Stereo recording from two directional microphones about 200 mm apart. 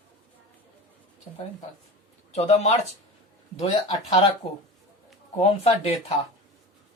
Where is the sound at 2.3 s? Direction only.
35° left (ahead or behind).